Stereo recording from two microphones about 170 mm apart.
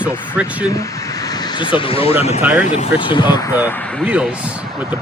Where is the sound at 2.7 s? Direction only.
30° left (ahead or behind).